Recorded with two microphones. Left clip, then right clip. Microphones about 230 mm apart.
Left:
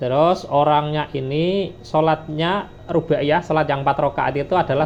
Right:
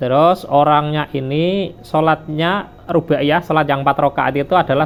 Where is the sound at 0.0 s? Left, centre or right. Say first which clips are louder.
Right 4 dB; right.